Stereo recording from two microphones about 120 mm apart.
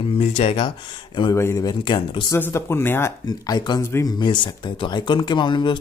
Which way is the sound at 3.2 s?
35° left (ahead or behind).